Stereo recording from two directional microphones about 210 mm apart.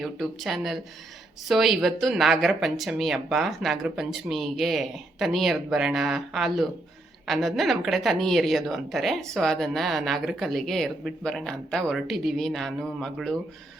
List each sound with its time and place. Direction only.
0.0 s a woman's voice: centre (ahead or behind)